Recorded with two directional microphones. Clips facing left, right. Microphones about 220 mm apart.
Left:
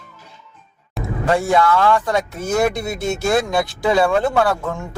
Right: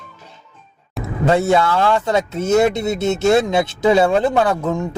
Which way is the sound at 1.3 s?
25° right (ahead or behind).